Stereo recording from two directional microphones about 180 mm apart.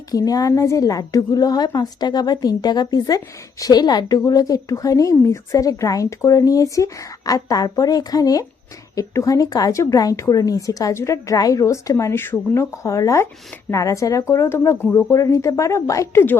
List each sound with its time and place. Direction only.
0.1 s a woman's voice: 20° left (ahead or behind)